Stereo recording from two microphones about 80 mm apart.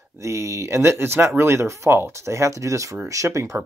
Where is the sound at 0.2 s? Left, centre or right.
Right.